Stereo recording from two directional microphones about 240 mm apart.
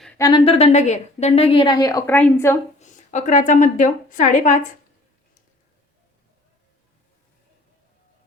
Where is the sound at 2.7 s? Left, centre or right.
Left.